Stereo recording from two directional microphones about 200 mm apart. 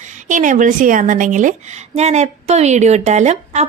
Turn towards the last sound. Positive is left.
turn(degrees=-35)  # may be behind; listen again after turning